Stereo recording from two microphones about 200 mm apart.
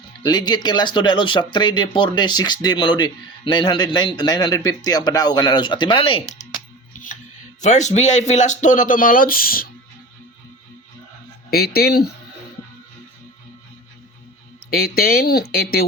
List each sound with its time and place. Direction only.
0.2 s speech: 20° left (ahead or behind)
7.6 s speech: 35° left (ahead or behind)
11.5 s speech: 50° left (ahead or behind)
14.7 s speech: 50° left (ahead or behind)